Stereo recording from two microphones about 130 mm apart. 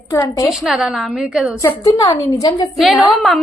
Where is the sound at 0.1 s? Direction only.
25° left (ahead or behind).